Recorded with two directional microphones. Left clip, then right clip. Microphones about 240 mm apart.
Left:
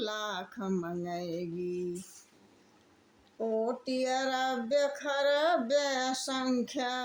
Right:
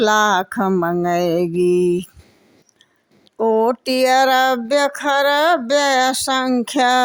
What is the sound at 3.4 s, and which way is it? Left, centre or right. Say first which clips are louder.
Speech: right 16 dB; right.